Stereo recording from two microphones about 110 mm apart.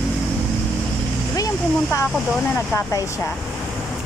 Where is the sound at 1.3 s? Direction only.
30° left (ahead or behind).